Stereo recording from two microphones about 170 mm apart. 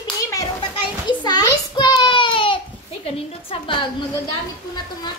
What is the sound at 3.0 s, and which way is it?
Speech, 30° left (ahead or behind).